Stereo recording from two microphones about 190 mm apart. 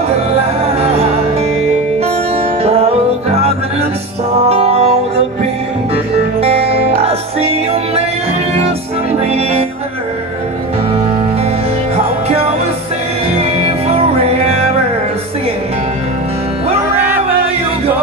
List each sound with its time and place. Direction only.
0.7 s music: 30° right (ahead or behind)
6.4 s music: 30° right (ahead or behind)
9.2 s music: 35° right (ahead or behind)
13.3 s music: 35° right (ahead or behind)
17.0 s music: 10° right (ahead or behind)